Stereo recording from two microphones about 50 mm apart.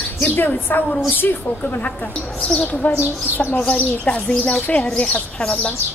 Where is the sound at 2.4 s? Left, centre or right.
Left.